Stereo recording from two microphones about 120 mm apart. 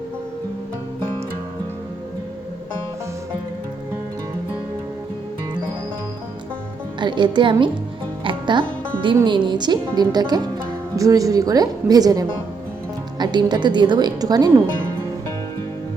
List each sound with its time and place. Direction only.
7.0 s a woman's voice: 40° right (ahead or behind)
8.2 s music: 40° right (ahead or behind)
9.2 s a woman's voice: 40° right (ahead or behind)